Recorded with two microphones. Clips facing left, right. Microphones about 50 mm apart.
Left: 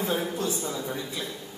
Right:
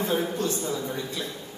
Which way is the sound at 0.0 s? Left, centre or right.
Centre.